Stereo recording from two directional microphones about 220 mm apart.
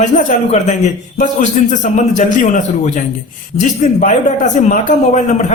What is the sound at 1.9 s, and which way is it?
A man's voice, 35° left (ahead or behind).